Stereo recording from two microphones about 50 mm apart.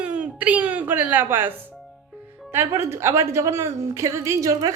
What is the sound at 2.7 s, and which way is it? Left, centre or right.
A woman's voice, right.